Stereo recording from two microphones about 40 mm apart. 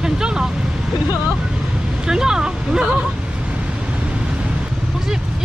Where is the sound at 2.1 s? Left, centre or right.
Centre.